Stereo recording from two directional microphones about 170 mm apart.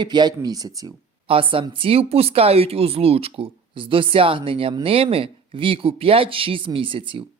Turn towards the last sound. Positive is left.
turn(degrees=-30)  # may be behind; listen again after turning